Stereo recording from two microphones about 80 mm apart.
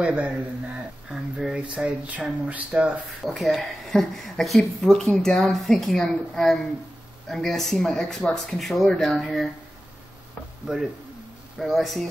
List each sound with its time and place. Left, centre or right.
0.0 s a man's voice: centre
3.3 s speech: centre
10.7 s speech: centre